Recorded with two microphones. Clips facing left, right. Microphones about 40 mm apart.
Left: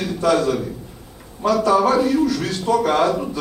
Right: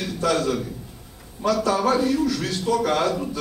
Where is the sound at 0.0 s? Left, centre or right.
Centre.